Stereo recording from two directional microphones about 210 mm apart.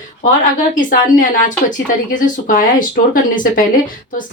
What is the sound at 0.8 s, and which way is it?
A woman's voice, 40° left (ahead or behind).